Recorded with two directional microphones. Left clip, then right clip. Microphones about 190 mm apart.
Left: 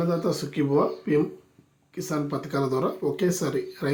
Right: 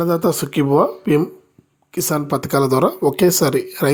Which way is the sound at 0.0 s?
60° right (ahead or behind).